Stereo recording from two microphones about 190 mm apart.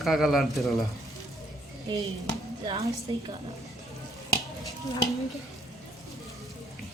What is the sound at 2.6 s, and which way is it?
Speech, 25° right (ahead or behind).